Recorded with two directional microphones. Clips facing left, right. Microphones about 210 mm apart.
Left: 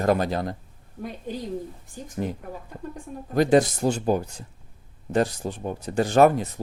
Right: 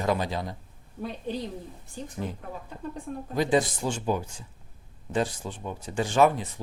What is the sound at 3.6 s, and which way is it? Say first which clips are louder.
Speech: left 5 dB; 40° left (ahead or behind).